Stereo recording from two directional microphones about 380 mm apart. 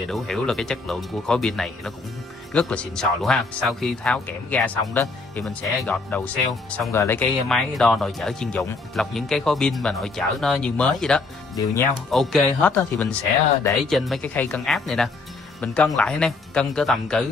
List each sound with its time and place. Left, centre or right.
0.1 s speech: centre